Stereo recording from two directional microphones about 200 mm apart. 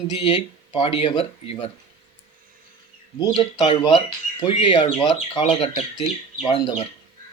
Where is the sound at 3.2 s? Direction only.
30° left (ahead or behind).